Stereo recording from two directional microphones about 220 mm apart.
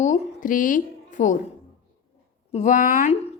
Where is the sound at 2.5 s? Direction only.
35° left (ahead or behind).